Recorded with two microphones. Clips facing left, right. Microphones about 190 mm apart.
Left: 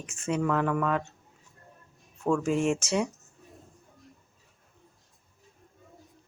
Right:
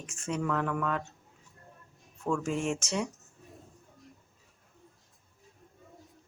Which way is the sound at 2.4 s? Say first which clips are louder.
Left 5 dB; 5° left (ahead or behind).